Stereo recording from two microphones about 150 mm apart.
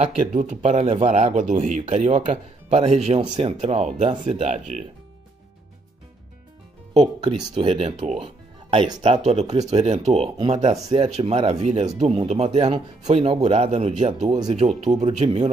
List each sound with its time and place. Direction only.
0.0 s speech: 60° right (ahead or behind)
7.5 s speech: 35° right (ahead or behind)
8.2 s music: 35° right (ahead or behind)
9.1 s speech: 45° right (ahead or behind)
15.2 s speech: 35° right (ahead or behind)